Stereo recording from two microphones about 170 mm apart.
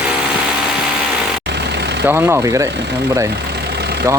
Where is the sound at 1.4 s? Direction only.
85° right.